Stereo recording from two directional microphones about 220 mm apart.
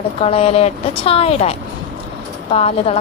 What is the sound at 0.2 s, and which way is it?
Speech, 25° left (ahead or behind).